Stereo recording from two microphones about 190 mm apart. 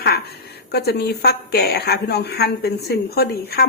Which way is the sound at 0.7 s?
55° left (ahead or behind).